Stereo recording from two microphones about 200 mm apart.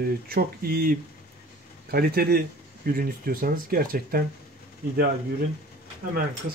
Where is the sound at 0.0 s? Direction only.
50° right (ahead or behind).